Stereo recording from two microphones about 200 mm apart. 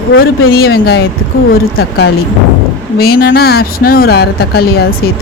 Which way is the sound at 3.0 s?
50° left (ahead or behind).